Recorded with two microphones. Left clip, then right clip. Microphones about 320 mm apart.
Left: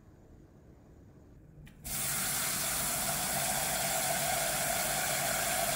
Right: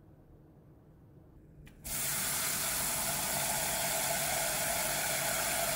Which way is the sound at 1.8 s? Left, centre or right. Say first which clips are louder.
Left 1 dB; centre.